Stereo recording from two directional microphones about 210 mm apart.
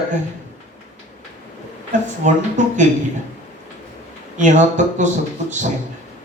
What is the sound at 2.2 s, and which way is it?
Speech, 35° right (ahead or behind).